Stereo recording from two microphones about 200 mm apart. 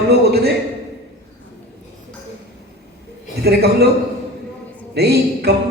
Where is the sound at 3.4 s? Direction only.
55° right (ahead or behind).